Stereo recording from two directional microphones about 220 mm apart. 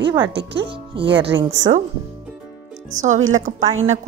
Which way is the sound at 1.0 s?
55° right (ahead or behind).